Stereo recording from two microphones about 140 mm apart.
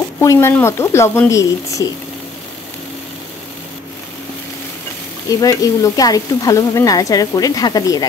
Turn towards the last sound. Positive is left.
turn(degrees=25)  # may be behind; listen again after turning